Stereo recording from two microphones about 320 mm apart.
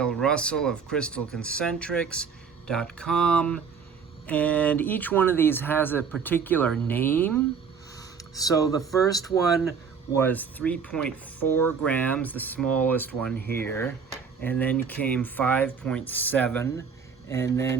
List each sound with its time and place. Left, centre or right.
0.0 s speech: centre
7.9 s a sound: centre
9.0 s speech: centre